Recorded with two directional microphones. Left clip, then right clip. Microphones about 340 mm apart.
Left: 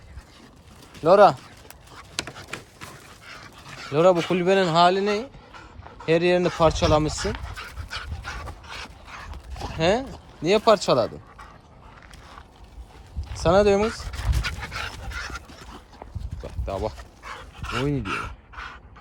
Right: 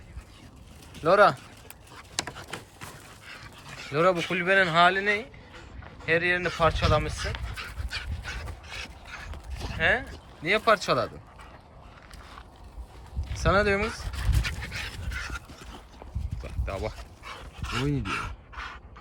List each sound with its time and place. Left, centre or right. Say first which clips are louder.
1.0 s a sound: left 5 dB; centre
2.1 s dog: left 2 dB; centre
6.1 s speech: left 4 dB; centre
7.3 s dog: left 1 dB; centre
8.3 s dog: left 3 dB; centre
9.8 s speech: left 2 dB; centre
13.4 s dog: left 5 dB; centre